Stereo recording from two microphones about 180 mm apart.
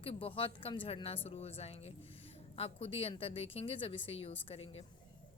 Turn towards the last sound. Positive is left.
turn(degrees=35)  # may be behind; listen again after turning